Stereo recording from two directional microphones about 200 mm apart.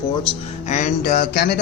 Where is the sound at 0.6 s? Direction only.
35° left (ahead or behind).